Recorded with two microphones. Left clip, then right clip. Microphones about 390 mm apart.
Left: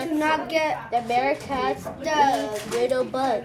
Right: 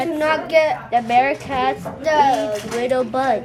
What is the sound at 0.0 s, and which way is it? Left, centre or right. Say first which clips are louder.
A woman's voice: right 4 dB; right.